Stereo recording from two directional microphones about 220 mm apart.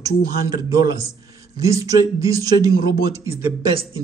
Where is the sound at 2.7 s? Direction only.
45° left (ahead or behind).